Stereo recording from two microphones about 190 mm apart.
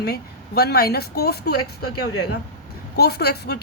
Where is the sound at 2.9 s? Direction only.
60° left (ahead or behind).